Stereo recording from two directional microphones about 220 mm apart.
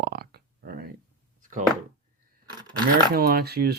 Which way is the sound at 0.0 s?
45° right (ahead or behind).